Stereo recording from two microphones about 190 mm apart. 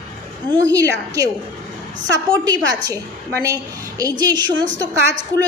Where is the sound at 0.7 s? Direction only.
15° right (ahead or behind).